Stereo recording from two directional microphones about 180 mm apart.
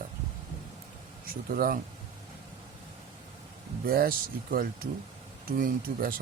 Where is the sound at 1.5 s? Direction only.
50° right (ahead or behind).